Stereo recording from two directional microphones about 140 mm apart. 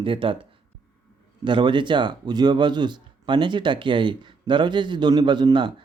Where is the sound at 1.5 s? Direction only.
35° right (ahead or behind).